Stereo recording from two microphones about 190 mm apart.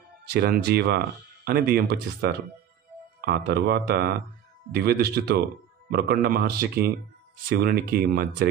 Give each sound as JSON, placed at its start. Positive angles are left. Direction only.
{"t": 0.2, "sound": "speech", "side_deg": -55}